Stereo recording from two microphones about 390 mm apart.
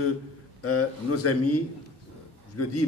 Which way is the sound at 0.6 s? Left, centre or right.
Left.